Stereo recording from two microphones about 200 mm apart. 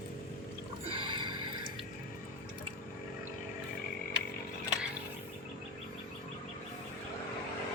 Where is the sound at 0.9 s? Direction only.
25° right (ahead or behind).